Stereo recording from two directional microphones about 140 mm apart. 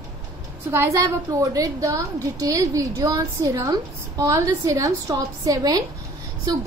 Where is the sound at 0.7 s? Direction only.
20° right (ahead or behind).